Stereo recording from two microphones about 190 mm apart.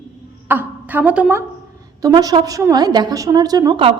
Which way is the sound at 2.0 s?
20° right (ahead or behind).